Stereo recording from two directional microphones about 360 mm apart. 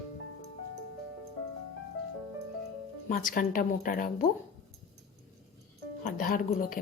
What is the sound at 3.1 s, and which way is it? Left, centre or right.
Speech, left.